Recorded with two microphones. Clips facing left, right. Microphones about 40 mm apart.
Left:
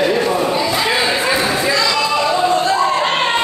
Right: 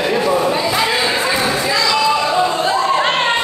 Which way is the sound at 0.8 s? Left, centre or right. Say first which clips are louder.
Even; centre.